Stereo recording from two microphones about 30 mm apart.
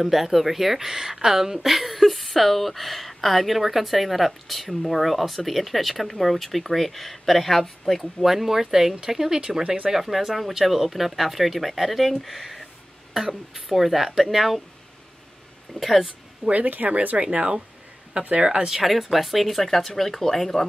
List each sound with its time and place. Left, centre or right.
0.0 s speech: centre
8.2 s speech: centre
9.6 s speech: right
9.8 s speech: centre
15.8 s speech: centre
16.4 s speech: right
17.2 s speech: right
18.7 s speech: centre